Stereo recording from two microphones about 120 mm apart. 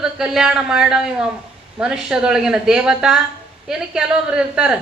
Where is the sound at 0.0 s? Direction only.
5° right (ahead or behind).